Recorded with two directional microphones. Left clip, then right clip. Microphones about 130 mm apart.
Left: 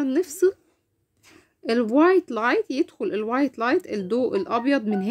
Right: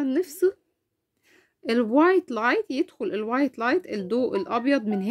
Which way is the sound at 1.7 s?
20° right (ahead or behind).